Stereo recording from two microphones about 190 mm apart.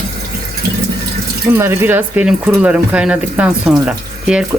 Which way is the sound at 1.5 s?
15° right (ahead or behind).